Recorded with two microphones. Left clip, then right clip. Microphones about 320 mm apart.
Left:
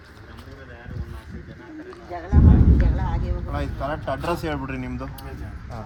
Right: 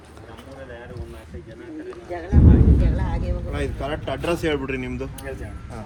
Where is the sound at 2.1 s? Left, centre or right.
Left.